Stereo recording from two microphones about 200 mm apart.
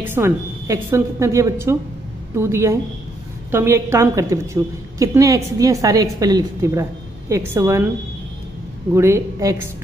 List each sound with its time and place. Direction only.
0.0 s a woman's voice: 10° right (ahead or behind)
8.9 s a woman's voice: 15° right (ahead or behind)